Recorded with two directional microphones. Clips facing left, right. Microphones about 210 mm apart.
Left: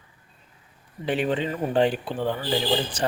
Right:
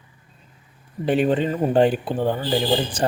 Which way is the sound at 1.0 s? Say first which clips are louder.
Right 5 dB; 45° right (ahead or behind).